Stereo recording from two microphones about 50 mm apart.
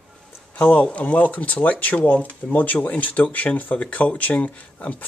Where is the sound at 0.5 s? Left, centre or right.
Left.